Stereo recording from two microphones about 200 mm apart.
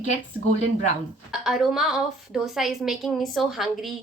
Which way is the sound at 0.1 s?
35° left (ahead or behind).